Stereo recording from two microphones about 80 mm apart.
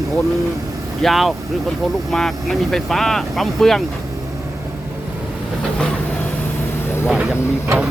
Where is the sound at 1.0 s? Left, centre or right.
Centre.